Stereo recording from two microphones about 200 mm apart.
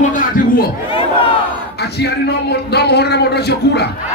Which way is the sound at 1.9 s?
55° left (ahead or behind).